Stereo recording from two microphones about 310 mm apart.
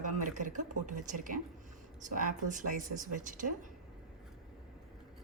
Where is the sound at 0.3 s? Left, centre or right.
Right.